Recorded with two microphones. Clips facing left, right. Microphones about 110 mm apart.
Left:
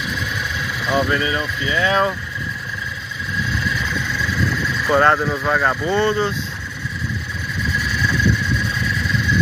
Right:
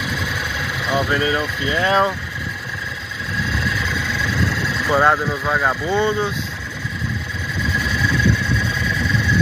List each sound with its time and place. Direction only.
0.8 s speech: 5° right (ahead or behind)
1.1 s speech: 25° right (ahead or behind)
4.8 s speech: 5° right (ahead or behind)